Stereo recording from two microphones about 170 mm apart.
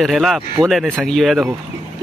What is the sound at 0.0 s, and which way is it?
Speech, centre (ahead or behind).